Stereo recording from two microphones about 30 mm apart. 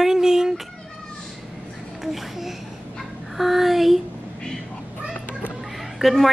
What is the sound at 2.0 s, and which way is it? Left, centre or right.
Speech, centre.